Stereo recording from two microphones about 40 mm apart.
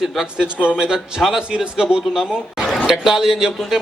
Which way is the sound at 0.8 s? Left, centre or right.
Centre.